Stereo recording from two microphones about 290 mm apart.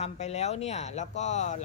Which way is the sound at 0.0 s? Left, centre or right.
Left.